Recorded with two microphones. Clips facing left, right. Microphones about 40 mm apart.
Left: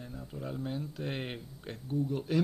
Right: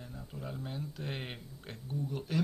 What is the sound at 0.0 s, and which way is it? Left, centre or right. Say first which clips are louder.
Speech: left 3 dB; centre.